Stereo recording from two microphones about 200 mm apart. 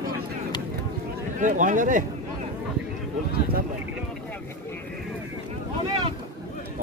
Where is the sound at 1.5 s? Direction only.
40° right (ahead or behind).